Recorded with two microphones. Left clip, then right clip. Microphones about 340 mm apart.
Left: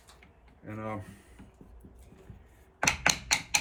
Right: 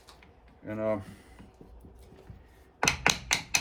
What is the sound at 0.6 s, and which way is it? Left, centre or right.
Speech, centre.